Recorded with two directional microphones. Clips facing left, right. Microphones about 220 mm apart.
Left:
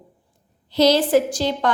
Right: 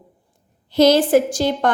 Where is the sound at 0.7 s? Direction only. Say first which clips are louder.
Right 3 dB; 50° right (ahead or behind).